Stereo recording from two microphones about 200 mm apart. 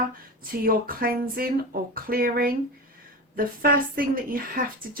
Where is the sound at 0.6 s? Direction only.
45° right (ahead or behind).